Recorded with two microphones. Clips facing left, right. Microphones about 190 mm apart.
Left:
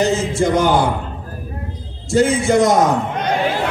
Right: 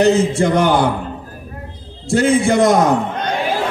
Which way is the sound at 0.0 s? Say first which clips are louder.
Right 3 dB; 60° right (ahead or behind).